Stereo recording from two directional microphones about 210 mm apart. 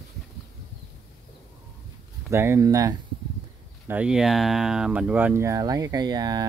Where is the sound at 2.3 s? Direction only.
10° right (ahead or behind).